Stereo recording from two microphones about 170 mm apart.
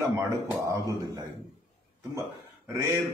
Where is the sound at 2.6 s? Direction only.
15° right (ahead or behind).